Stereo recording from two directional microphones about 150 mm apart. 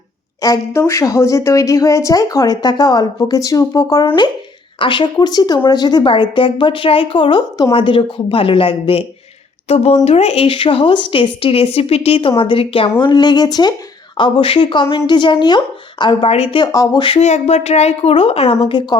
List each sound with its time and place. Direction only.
0.4 s a woman's voice: 20° left (ahead or behind); by 16.6 s 40° left (ahead or behind)
16.7 s a woman's voice: 25° left (ahead or behind)
17.2 s speech: 50° left (ahead or behind)